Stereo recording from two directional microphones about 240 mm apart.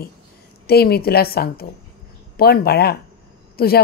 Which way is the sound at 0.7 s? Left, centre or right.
Left.